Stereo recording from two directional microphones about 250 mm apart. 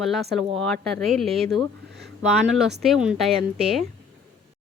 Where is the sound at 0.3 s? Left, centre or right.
Centre.